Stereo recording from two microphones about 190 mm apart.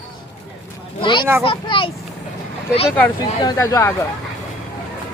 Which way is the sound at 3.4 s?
20° left (ahead or behind).